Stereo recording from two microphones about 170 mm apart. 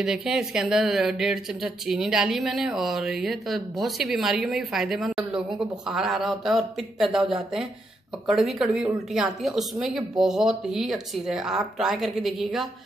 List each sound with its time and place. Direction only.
0.0 s speech: 5° right (ahead or behind)
8.4 s speech: centre (ahead or behind)